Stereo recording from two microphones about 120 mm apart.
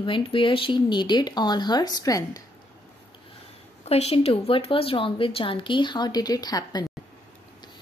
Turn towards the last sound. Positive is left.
turn(degrees=35)  # may be behind; listen again after turning